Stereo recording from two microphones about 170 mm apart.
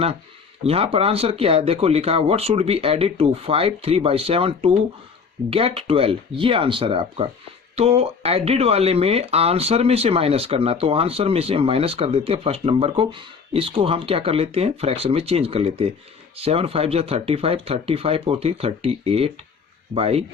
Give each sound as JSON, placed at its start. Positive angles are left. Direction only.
{"t": 0.6, "sound": "speech", "side_deg": -35}